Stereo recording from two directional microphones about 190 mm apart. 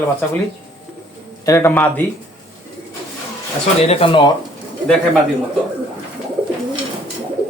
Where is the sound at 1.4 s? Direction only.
15° left (ahead or behind).